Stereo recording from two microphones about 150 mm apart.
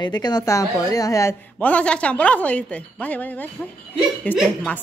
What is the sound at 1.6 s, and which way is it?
A woman's voice, 10° left (ahead or behind).